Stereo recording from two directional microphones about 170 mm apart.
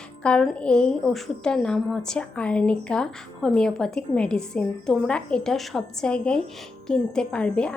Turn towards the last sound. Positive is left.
turn(degrees=5)  # may be behind; listen again after turning